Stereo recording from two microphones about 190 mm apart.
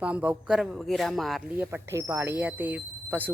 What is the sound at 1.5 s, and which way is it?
A woman's voice, 10° right (ahead or behind).